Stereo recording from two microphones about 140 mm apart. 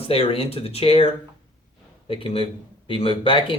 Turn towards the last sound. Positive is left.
turn(degrees=40)  # may be behind; listen again after turning